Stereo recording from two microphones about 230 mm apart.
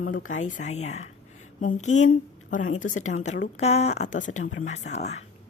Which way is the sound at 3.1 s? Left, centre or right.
Left.